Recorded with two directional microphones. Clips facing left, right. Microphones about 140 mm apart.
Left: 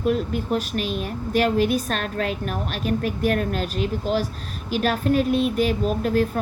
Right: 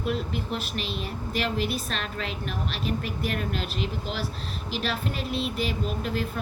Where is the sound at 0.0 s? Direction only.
45° left (ahead or behind).